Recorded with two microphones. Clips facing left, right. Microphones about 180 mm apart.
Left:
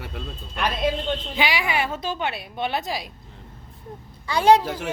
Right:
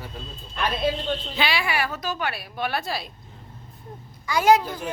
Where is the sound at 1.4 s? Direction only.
15° left (ahead or behind).